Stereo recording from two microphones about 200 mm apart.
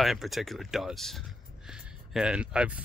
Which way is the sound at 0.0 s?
Centre (ahead or behind).